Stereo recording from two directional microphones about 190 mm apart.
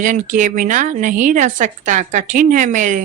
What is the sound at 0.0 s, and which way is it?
Speech, 40° right (ahead or behind).